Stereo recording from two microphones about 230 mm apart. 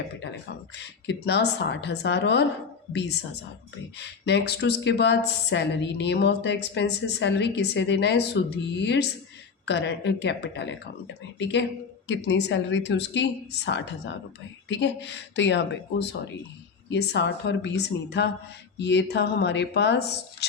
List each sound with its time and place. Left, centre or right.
0.8 s speech: left
3.9 s speech: left